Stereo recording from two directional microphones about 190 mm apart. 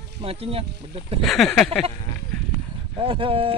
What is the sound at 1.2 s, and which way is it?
Speech, centre (ahead or behind).